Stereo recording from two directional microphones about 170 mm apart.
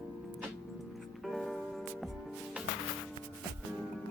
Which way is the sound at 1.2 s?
Centre (ahead or behind).